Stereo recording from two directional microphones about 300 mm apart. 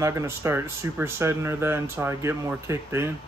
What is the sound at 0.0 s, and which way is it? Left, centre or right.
Speech, centre.